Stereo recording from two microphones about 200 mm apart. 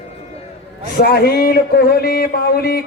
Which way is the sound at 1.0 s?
50° left (ahead or behind).